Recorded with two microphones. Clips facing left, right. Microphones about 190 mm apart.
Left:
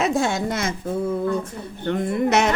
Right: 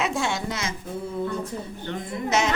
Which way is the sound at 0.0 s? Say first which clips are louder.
Left 5 dB; 45° left (ahead or behind).